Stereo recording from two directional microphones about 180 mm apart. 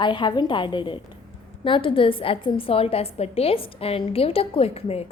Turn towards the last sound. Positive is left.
turn(degrees=35)  # may be behind; listen again after turning